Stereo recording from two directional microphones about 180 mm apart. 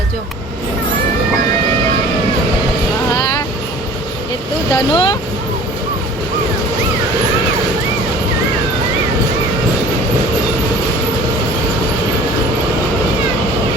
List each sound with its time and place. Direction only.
4.7 s speech: 25° left (ahead or behind)